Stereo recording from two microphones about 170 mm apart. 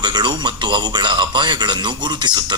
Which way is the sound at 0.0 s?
25° right (ahead or behind).